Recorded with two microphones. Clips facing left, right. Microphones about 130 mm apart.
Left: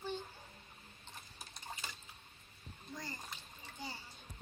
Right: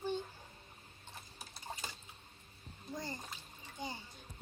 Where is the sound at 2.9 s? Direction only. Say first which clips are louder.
Right 4 dB; 25° right (ahead or behind).